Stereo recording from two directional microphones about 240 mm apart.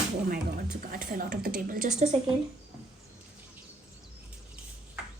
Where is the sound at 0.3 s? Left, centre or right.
Right.